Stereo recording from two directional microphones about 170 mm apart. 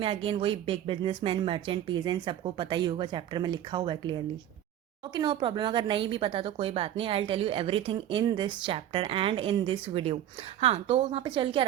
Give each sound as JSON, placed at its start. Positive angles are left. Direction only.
{"t": 0.0, "sound": "a woman's voice", "side_deg": -30}